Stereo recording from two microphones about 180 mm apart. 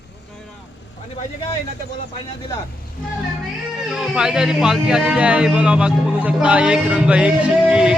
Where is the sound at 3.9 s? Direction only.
5° right (ahead or behind).